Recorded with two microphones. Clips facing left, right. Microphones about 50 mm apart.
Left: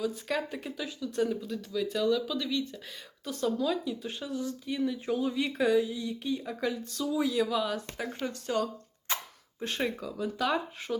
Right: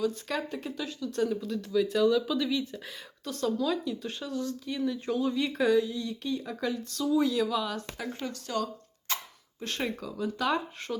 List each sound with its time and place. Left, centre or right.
0.0 s speech: centre
3.2 s speech: centre
8.3 s speech: left
9.1 s a sound: left
9.6 s speech: centre